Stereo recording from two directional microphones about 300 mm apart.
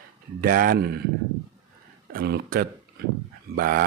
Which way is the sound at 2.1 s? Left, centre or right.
Right.